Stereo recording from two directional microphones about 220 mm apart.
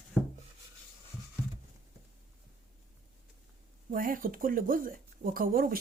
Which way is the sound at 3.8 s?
40° right (ahead or behind).